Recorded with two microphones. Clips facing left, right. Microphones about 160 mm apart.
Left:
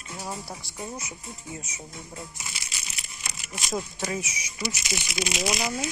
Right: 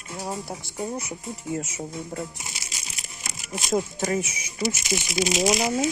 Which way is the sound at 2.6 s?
40° right (ahead or behind).